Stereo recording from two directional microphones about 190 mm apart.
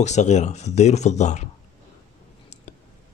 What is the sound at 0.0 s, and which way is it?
Speech, 40° left (ahead or behind).